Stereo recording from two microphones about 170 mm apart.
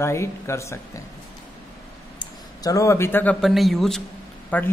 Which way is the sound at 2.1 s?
20° left (ahead or behind).